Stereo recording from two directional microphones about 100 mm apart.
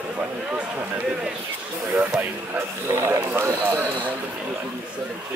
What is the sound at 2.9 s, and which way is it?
Speech, 30° right (ahead or behind).